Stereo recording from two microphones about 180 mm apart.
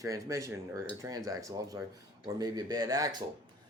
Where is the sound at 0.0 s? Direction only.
20° right (ahead or behind).